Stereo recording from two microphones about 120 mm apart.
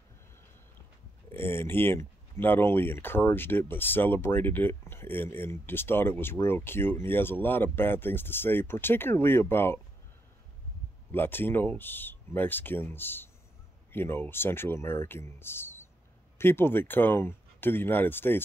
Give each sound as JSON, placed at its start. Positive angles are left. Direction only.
{"t": 1.3, "sound": "speech", "side_deg": 20}
{"t": 11.1, "sound": "speech", "side_deg": 20}